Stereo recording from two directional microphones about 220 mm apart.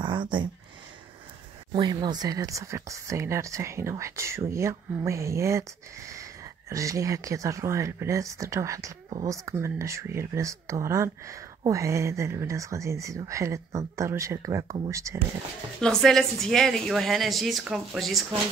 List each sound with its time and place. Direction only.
0.0 s a sound: 20° right (ahead or behind)
1.7 s speech: 20° right (ahead or behind)
15.8 s a woman's voice: centre (ahead or behind)